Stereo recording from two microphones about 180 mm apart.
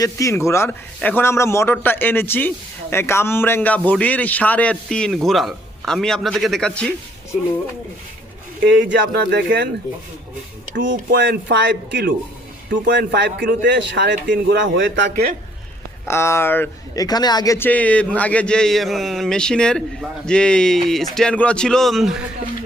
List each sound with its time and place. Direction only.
0.0 s a man's voice: 15° left (ahead or behind)
8.6 s speech: 80° right
10.7 s speech: 80° right
13.4 s speech: 55° right (ahead or behind); by 14.2 s 75° right (ahead or behind)
14.6 s a man's voice: 90° right
15.1 s speech: 55° right (ahead or behind)
16.0 s a man's voice: 15° left (ahead or behind)